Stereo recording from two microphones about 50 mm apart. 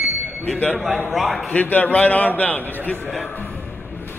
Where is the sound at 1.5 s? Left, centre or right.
Left.